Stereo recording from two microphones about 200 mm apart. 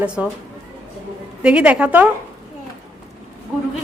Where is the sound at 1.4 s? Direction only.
5° right (ahead or behind).